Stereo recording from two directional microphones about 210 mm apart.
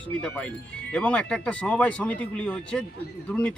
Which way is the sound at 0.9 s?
5° left (ahead or behind).